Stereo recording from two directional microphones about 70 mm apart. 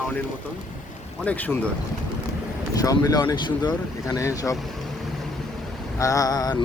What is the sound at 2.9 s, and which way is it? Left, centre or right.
Speech, left.